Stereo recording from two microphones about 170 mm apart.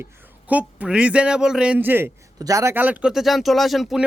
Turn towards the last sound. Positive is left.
turn(degrees=0)  # may be behind; listen again after turning